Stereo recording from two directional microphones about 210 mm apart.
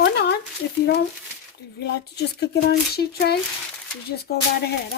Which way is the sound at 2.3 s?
50° left (ahead or behind).